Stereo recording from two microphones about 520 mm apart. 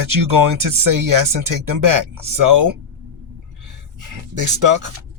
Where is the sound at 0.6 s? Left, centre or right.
Right.